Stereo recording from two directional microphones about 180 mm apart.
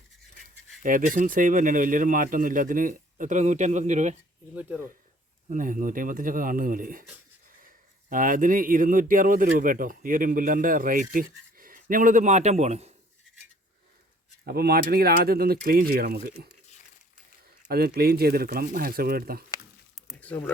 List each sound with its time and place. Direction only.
0.8 s a man's voice: 50° right (ahead or behind)
5.5 s a man's voice: 45° right (ahead or behind)
8.1 s a man's voice: 50° right (ahead or behind)
14.4 s speech: 60° right (ahead or behind)
17.7 s speech: 60° right (ahead or behind)
20.0 s a sound: centre (ahead or behind)